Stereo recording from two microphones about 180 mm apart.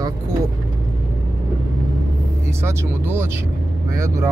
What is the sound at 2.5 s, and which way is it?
Speech, 15° right (ahead or behind).